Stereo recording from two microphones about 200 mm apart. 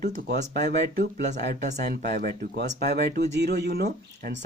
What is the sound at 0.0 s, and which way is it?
Speech, 45° right (ahead or behind).